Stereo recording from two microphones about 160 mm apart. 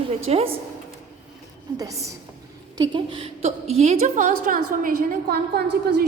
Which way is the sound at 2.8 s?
30° right (ahead or behind).